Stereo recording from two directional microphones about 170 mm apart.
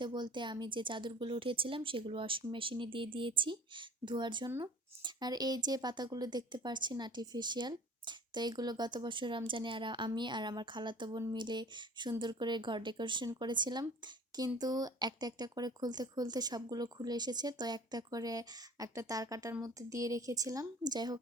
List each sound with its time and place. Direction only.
0.0 s speech: 25° right (ahead or behind)